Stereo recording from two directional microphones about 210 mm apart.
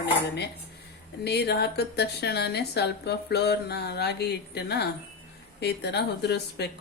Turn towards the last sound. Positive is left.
turn(degrees=50)  # may be behind; listen again after turning